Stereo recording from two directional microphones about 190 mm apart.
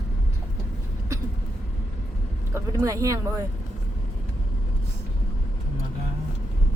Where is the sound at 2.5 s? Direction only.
15° right (ahead or behind).